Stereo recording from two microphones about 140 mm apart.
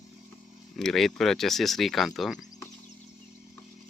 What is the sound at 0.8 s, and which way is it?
Speech, 5° left (ahead or behind).